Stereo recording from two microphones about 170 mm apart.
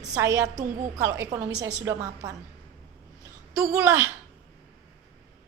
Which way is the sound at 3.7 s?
15° right (ahead or behind).